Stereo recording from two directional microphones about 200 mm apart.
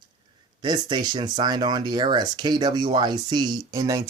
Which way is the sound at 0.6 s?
20° right (ahead or behind).